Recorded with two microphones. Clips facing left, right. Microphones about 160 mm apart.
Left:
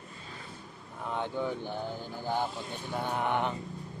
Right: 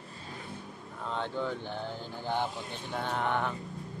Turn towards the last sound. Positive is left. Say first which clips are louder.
# left 1 dB
turn(degrees=15)  # may be behind; listen again after turning